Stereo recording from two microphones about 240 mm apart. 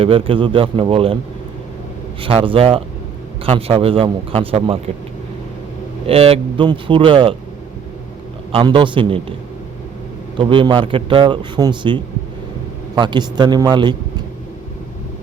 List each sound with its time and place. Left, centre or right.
0.0 s a man's voice: right
2.2 s a man's voice: right
6.1 s a man's voice: right
8.5 s a man's voice: centre
10.3 s a man's voice: right